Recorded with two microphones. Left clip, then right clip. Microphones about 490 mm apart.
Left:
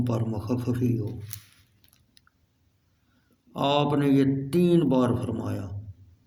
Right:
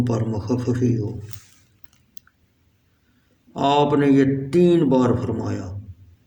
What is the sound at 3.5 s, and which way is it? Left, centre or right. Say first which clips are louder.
Speech: right 6 dB; left.